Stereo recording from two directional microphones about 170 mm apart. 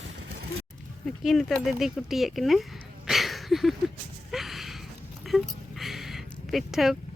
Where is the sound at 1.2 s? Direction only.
Centre (ahead or behind).